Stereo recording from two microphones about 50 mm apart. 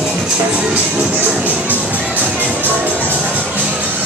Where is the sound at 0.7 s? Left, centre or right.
Right.